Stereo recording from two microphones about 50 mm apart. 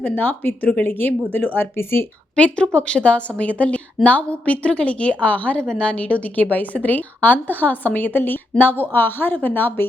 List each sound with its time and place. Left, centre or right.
0.0 s a woman's voice: left
1.7 s speech: left
2.3 s a woman's voice: left
5.5 s a woman's voice: left